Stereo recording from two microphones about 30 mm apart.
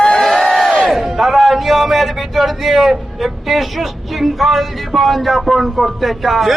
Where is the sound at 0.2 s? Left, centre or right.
Centre.